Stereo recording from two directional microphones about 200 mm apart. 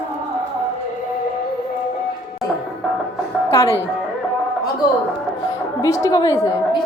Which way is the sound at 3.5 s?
15° left (ahead or behind).